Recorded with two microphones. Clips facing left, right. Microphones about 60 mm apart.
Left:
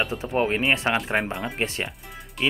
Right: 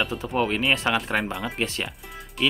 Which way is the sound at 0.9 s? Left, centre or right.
Centre.